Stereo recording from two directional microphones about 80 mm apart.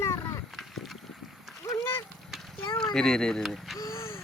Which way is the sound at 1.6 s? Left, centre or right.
Left.